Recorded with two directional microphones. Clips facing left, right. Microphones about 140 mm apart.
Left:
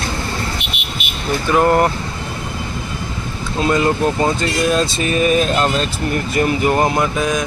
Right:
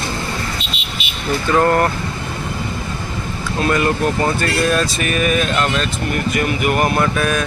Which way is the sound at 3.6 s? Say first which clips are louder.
Left 1 dB; 20° left (ahead or behind).